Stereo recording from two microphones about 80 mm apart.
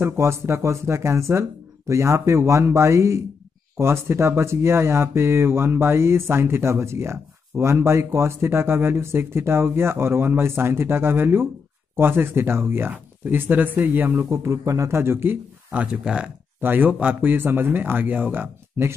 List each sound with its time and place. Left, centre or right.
0.0 s speech: right
14.3 s speech: right; by 16.3 s centre
16.6 s speech: right